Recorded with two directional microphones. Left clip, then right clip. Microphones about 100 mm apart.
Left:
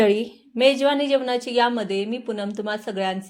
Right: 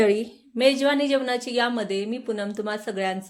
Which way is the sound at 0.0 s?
25° left (ahead or behind).